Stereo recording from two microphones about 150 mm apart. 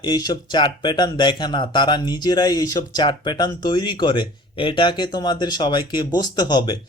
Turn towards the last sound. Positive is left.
turn(degrees=30)  # may be behind; listen again after turning